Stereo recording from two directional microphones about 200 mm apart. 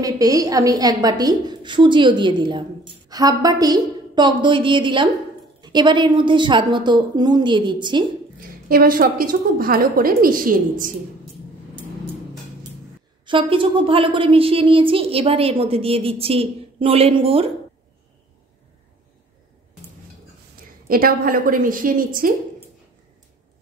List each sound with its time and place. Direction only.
0.0 s a woman's voice: 15° right (ahead or behind)
8.4 s a woman's voice: 45° right (ahead or behind)
13.2 s a woman's voice: 25° right (ahead or behind)
20.9 s a woman's voice: 45° right (ahead or behind)